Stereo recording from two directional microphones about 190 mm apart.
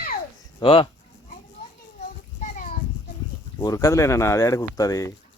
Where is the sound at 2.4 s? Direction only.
40° left (ahead or behind).